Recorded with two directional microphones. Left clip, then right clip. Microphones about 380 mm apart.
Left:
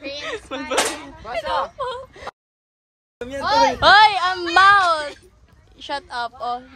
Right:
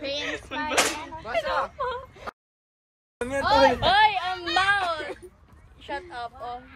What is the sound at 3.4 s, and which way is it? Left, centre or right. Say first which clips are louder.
Speech: left 4 dB; left.